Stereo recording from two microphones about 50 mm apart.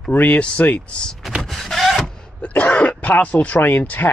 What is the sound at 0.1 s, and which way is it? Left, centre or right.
Speech, left.